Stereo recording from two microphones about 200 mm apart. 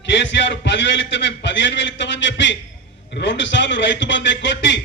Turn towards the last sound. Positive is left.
turn(degrees=65)  # may be behind; listen again after turning